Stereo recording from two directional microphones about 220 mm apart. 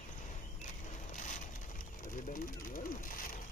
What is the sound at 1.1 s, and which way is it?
Vehicle, 35° left (ahead or behind).